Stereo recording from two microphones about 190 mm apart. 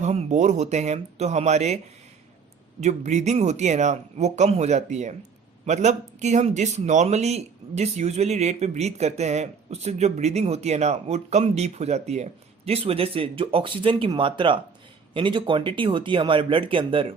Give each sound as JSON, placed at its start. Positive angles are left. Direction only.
{"t": 0.0, "sound": "speech", "side_deg": -35}
{"t": 2.8, "sound": "speech", "side_deg": -40}